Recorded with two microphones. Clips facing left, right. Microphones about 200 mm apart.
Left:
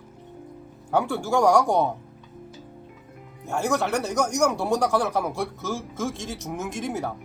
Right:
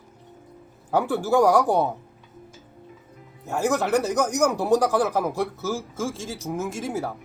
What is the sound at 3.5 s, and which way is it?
Speech, 5° right (ahead or behind).